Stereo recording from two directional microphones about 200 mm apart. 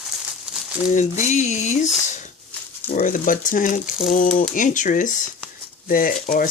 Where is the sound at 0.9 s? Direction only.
40° left (ahead or behind).